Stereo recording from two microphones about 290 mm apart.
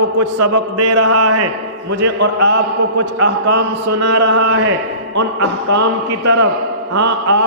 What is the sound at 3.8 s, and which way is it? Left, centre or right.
Speech, right.